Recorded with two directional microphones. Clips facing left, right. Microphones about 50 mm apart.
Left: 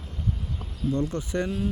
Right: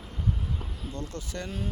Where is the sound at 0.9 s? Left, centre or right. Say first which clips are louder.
Left 10 dB; left.